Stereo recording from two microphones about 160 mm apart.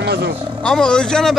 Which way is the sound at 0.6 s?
5° left (ahead or behind).